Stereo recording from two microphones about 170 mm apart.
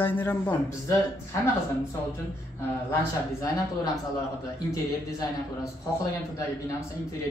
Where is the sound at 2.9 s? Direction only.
20° left (ahead or behind).